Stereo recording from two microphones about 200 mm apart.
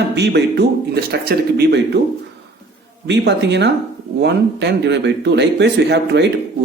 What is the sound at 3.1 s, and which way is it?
A man's voice, 60° right (ahead or behind).